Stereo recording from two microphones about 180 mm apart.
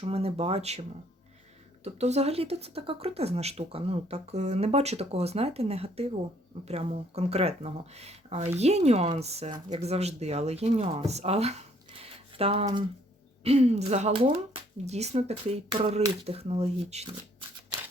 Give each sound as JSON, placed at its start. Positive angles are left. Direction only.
{"t": 0.0, "sound": "speech", "side_deg": -35}